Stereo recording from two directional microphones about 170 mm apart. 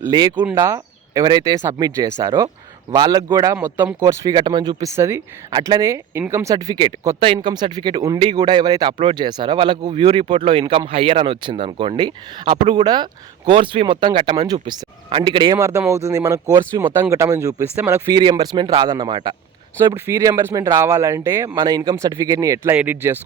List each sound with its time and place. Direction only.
0.0 s speech: 25° right (ahead or behind)
15.5 s speech: 15° right (ahead or behind)